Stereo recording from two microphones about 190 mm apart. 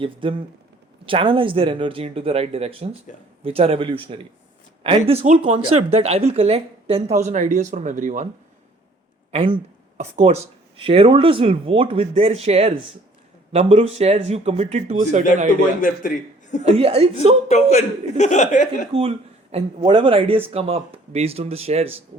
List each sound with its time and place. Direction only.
0.0 s speech: 30° right (ahead or behind)
9.3 s speech: 30° right (ahead or behind)
15.8 s a man's voice: 40° left (ahead or behind)
16.6 s speech: 30° right (ahead or behind)
17.5 s speech: 35° left (ahead or behind)
18.9 s speech: 30° right (ahead or behind)